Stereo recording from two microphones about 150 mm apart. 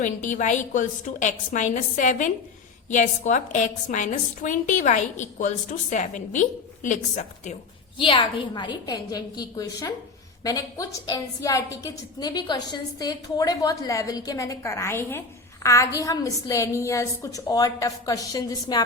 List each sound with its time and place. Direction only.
0.0 s a woman's voice: 55° left (ahead or behind)
7.9 s a woman's voice: 30° left (ahead or behind)